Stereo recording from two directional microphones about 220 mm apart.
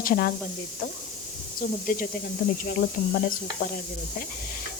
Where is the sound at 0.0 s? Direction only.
40° left (ahead or behind).